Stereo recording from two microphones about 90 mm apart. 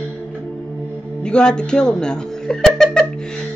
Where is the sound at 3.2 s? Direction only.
10° left (ahead or behind).